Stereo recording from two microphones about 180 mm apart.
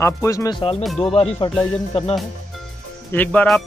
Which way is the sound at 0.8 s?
Centre (ahead or behind).